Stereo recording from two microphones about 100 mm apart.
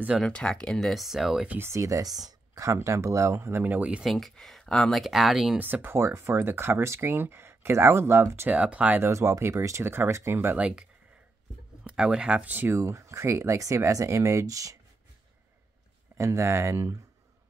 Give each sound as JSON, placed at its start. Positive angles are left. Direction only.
{"t": 0.2, "sound": "speech", "side_deg": 10}
{"t": 1.5, "sound": "speech", "side_deg": -25}
{"t": 3.6, "sound": "speech", "side_deg": -15}
{"t": 4.1, "sound": "speech", "side_deg": 0}
{"t": 5.6, "sound": "speech", "side_deg": -20}
{"t": 9.0, "sound": "speech", "side_deg": -30}
{"t": 16.2, "sound": "speech", "side_deg": -30}